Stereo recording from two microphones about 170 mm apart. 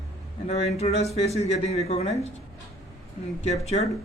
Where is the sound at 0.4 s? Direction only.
40° left (ahead or behind).